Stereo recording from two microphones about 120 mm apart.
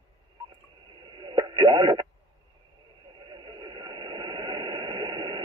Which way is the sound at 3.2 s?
35° right (ahead or behind).